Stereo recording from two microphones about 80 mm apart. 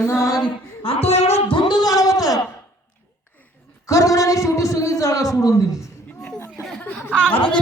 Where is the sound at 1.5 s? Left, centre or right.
Left.